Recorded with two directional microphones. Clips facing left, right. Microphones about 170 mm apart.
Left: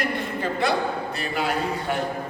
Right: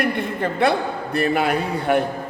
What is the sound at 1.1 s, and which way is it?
Speech, 60° right (ahead or behind).